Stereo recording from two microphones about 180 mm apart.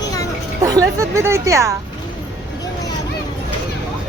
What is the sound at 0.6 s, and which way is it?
Speech, 15° right (ahead or behind).